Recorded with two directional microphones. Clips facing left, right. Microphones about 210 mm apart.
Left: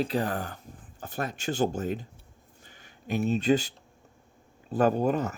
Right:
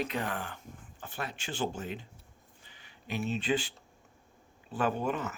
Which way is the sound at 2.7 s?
45° left (ahead or behind).